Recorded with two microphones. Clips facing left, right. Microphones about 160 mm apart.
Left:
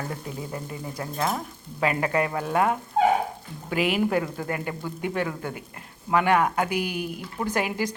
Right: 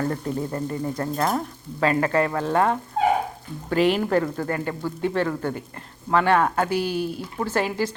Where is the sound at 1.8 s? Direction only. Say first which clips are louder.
Right 3 dB; 15° left (ahead or behind).